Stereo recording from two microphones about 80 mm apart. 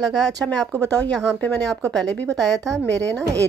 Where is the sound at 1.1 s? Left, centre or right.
Centre.